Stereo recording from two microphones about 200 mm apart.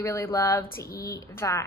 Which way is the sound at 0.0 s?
10° left (ahead or behind).